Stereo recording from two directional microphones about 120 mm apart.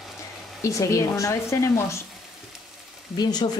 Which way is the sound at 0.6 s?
25° left (ahead or behind).